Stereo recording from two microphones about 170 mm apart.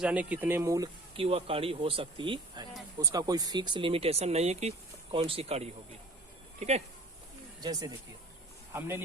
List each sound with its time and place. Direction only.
0.0 s speech: 5° right (ahead or behind)
1.1 s speech: 35° right (ahead or behind)
7.6 s speech: 20° right (ahead or behind)